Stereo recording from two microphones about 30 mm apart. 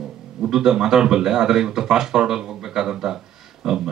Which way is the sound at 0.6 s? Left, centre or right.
Right.